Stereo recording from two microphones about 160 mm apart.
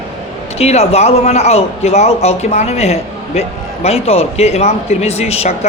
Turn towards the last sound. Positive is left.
turn(degrees=40)  # may be behind; listen again after turning